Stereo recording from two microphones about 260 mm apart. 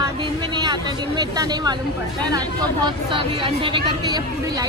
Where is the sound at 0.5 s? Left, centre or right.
Centre.